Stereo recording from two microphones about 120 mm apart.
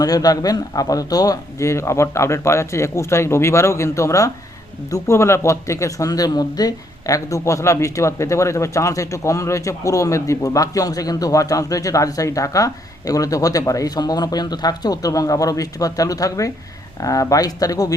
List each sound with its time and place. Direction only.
0.0 s speech: 30° left (ahead or behind)